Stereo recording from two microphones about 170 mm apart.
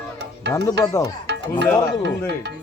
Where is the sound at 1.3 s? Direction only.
85° right.